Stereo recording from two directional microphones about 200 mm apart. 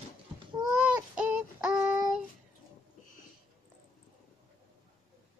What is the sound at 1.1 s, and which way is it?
Child singing, 5° right (ahead or behind).